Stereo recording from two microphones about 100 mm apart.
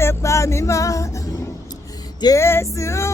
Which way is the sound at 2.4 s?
25° left (ahead or behind).